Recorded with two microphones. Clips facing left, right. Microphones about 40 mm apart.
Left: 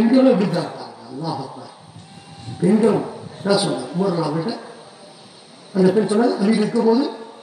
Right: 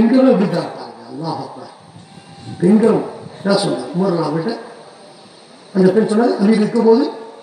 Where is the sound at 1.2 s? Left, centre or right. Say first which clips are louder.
Right 3 dB; centre.